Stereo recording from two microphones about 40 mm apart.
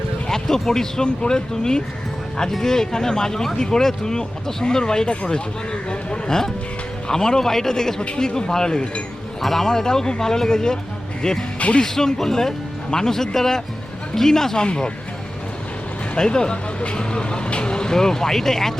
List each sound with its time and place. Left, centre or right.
0.3 s music: centre
0.6 s speech: centre
5.9 s a sound: centre
7.1 s speech: centre
9.4 s speech: centre
16.1 s speech: centre